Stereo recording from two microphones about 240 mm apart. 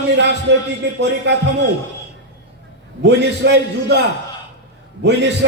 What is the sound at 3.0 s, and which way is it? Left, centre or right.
Speech, right.